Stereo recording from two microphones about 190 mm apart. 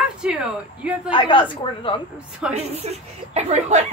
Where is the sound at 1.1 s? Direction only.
25° left (ahead or behind).